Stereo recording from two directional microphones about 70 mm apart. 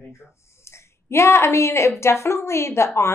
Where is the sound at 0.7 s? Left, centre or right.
Left.